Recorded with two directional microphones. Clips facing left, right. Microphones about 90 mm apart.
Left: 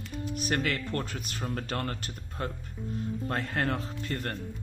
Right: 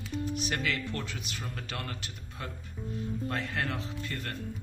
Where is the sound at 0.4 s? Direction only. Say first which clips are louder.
Left 3 dB; 45° left (ahead or behind).